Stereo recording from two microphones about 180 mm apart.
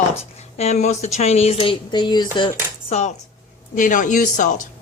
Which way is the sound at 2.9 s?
35° left (ahead or behind).